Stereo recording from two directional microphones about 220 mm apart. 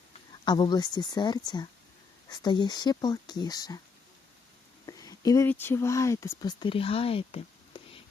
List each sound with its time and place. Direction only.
0.4 s speech: 20° left (ahead or behind)
4.9 s speech: 15° left (ahead or behind)